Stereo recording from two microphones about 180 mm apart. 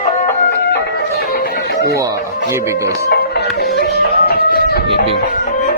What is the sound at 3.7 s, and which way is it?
Music, 60° left (ahead or behind).